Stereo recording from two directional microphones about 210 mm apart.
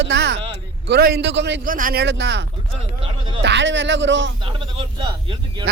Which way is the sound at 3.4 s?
55° right (ahead or behind).